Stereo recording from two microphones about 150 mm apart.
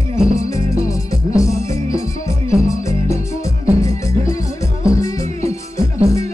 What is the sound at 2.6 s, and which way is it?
Music, 20° left (ahead or behind).